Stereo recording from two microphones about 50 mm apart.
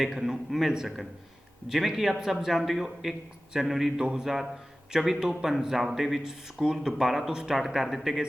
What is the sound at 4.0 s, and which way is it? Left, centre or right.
Speech, centre.